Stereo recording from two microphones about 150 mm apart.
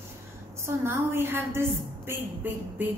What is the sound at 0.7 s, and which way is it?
A woman's voice, 15° right (ahead or behind).